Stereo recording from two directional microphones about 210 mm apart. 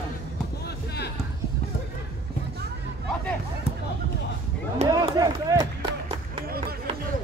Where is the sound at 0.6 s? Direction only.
50° left (ahead or behind).